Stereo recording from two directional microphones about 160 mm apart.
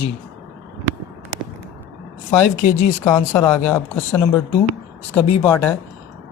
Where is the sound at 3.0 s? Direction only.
20° left (ahead or behind).